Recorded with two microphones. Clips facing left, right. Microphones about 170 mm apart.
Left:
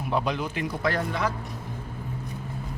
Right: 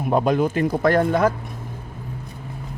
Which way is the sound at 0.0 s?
45° right (ahead or behind).